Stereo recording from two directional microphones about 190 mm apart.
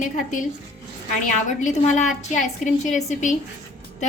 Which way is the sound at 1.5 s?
40° left (ahead or behind).